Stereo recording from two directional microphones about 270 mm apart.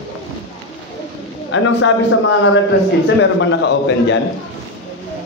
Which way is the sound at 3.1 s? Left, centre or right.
Left.